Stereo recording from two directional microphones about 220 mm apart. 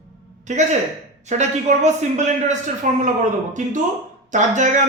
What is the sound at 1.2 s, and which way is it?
A man's voice, 30° right (ahead or behind).